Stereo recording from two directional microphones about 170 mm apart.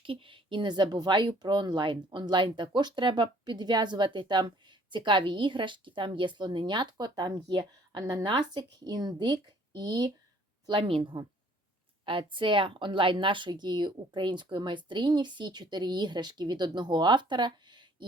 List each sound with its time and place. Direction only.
0.0 s speech: 30° right (ahead or behind)